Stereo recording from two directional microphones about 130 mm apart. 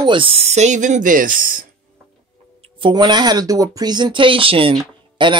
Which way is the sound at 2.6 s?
35° right (ahead or behind).